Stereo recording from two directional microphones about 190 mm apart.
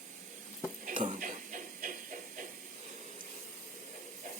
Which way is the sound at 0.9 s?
40° right (ahead or behind).